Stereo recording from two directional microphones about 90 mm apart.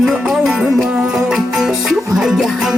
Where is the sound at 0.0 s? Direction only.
5° right (ahead or behind).